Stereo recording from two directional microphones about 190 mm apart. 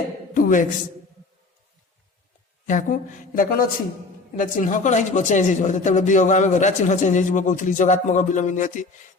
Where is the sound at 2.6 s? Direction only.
45° left (ahead or behind).